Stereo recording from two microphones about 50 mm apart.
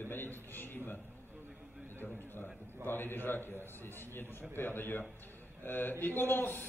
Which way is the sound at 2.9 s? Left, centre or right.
Left.